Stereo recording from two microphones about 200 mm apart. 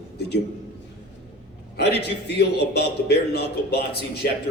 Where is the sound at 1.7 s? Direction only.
55° left (ahead or behind).